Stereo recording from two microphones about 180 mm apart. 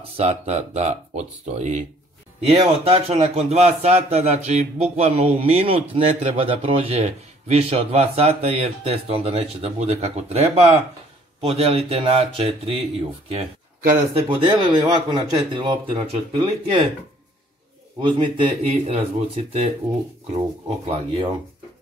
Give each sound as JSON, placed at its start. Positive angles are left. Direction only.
{"t": 0.2, "sound": "speech", "side_deg": -40}
{"t": 14.1, "sound": "speech", "side_deg": -25}
{"t": 18.0, "sound": "speech", "side_deg": -25}